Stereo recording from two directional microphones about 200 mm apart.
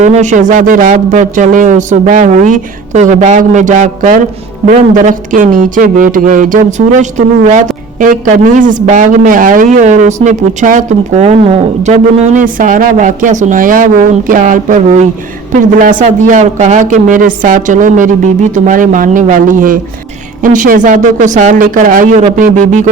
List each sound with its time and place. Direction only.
0.0 s speech: 35° right (ahead or behind)